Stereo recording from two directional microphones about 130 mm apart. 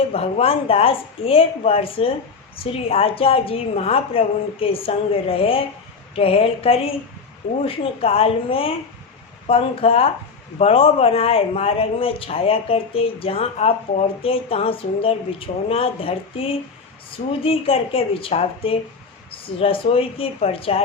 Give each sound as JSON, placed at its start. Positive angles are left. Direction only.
{"t": 0.1, "sound": "speech", "side_deg": 50}